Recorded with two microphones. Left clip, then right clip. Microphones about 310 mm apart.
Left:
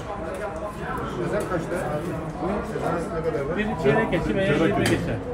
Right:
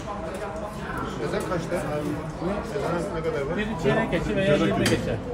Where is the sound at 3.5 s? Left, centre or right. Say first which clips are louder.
Left 4 dB; right.